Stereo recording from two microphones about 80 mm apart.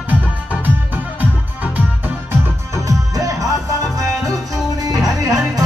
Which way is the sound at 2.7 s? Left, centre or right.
Right.